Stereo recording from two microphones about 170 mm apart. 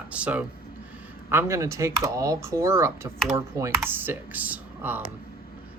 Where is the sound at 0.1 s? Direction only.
10° right (ahead or behind).